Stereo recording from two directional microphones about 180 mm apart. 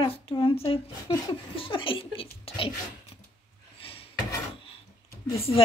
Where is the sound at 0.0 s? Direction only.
30° left (ahead or behind).